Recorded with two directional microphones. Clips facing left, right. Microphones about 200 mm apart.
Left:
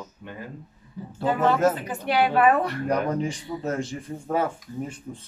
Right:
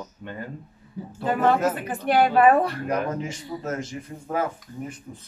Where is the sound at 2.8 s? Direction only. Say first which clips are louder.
Left 2 dB; 35° left (ahead or behind).